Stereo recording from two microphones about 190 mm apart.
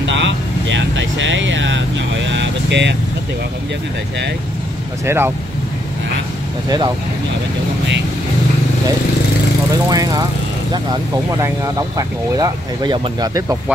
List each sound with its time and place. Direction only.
0.0 s vehicle: 75° right (ahead or behind)
5.0 s speech: 10° right (ahead or behind)
9.8 s speech: 20° right (ahead or behind)